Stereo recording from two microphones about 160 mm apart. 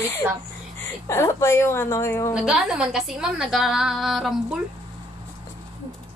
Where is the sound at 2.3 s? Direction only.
5° right (ahead or behind).